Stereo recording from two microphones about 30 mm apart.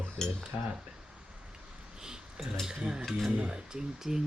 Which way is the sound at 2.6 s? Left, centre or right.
Right.